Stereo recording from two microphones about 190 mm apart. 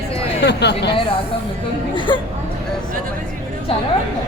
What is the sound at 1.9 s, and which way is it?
Speech, 25° left (ahead or behind).